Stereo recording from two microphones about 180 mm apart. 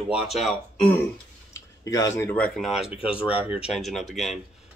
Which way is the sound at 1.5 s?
20° left (ahead or behind).